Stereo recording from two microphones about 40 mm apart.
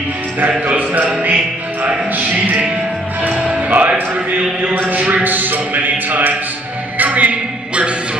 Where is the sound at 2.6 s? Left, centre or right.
Right.